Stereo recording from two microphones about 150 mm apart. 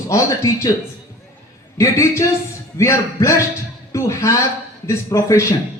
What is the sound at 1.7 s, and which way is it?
A man's voice, 20° left (ahead or behind).